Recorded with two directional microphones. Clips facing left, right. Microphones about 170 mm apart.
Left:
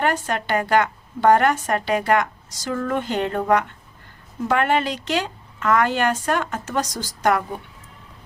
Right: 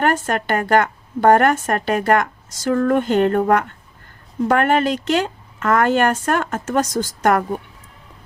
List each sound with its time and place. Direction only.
0.0 s speech: 50° right (ahead or behind)